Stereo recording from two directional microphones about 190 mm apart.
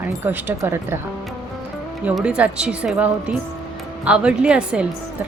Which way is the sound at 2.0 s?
5° right (ahead or behind).